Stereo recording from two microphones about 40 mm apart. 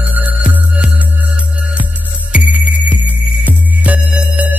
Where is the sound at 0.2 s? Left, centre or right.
Right.